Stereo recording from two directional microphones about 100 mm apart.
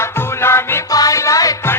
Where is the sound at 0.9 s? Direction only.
35° left (ahead or behind).